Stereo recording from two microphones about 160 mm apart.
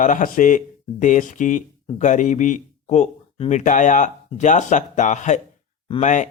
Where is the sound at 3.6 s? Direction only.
55° left (ahead or behind).